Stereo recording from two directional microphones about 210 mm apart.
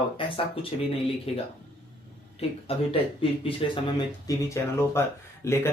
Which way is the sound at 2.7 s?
25° left (ahead or behind).